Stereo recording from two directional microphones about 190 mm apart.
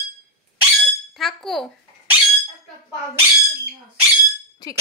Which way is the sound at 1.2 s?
Centre (ahead or behind).